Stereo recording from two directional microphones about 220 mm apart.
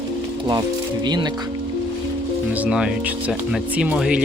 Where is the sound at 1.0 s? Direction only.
20° right (ahead or behind).